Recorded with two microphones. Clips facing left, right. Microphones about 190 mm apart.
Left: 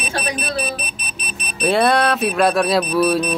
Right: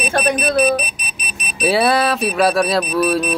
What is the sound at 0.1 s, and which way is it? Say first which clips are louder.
Speech: right 7 dB; 50° right (ahead or behind).